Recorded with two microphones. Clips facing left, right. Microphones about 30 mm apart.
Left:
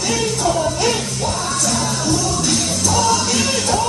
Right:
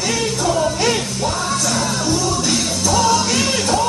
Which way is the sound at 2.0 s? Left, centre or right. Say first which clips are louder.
Left 1 dB; centre.